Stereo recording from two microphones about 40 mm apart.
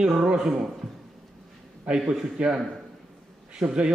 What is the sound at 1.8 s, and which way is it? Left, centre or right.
A man's voice, right.